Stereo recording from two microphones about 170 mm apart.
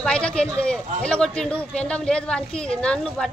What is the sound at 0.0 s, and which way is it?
Speech, 5° left (ahead or behind).